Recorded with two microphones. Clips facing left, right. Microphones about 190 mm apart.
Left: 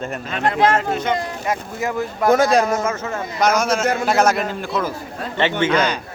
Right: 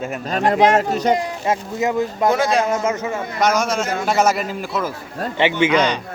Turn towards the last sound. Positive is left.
turn(degrees=5)  # may be behind; listen again after turning